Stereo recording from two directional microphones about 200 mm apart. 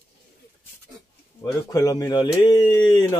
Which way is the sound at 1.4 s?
15° left (ahead or behind).